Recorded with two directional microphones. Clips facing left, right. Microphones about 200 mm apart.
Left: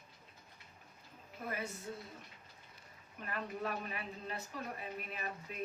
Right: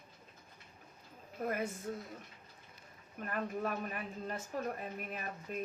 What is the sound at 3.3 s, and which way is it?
Speech, 45° right (ahead or behind).